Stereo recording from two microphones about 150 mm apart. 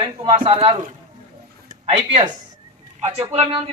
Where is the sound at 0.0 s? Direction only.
35° right (ahead or behind).